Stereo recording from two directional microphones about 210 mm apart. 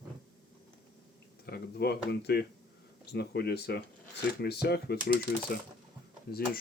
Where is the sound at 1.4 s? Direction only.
50° left (ahead or behind).